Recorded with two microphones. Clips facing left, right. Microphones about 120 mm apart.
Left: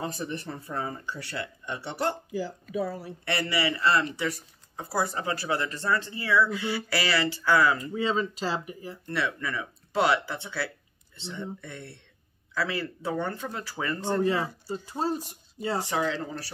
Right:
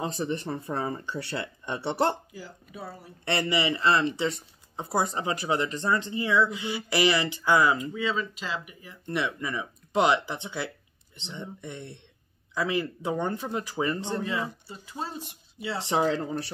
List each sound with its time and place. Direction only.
0.0 s speech: 25° right (ahead or behind)
2.7 s speech: 90° left
3.3 s speech: 25° right (ahead or behind)
7.9 s speech: 35° left (ahead or behind)
9.0 s speech: 20° right (ahead or behind)
14.2 s speech: 35° left (ahead or behind)
15.8 s speech: 25° right (ahead or behind)